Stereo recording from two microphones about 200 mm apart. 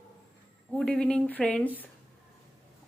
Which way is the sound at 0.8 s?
5° left (ahead or behind).